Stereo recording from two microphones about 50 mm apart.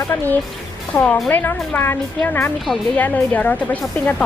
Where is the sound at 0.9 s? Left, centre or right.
Left.